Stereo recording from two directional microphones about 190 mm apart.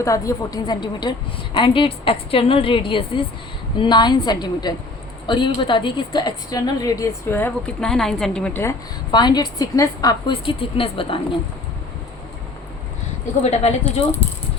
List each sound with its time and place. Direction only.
0.0 s a woman's voice: 15° left (ahead or behind)
9.1 s a woman's voice: 20° left (ahead or behind)
13.4 s speech: 35° left (ahead or behind)